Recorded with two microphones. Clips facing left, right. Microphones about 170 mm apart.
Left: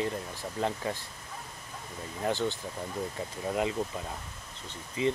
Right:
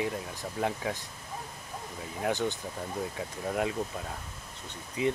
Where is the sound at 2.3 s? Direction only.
15° right (ahead or behind).